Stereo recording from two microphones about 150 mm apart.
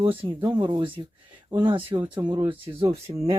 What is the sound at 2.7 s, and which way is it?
Speech, 40° right (ahead or behind).